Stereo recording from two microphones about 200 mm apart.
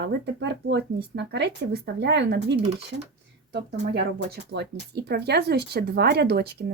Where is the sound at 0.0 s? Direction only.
60° right (ahead or behind).